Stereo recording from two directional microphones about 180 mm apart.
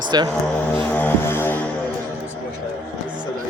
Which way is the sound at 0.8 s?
10° left (ahead or behind).